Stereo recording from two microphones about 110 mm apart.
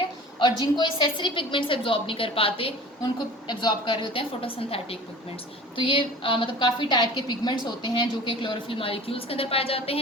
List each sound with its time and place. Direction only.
0.3 s a woman's voice: 40° left (ahead or behind); by 2.7 s 60° left (ahead or behind)
3.4 s a woman's voice: 45° left (ahead or behind); by 10.0 s 60° left (ahead or behind)